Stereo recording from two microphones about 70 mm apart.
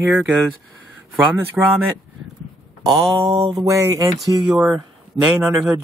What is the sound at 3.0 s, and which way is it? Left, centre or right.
Mantra, right.